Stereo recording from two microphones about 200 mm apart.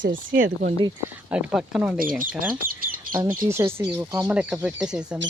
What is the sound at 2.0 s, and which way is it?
Speech, 45° right (ahead or behind).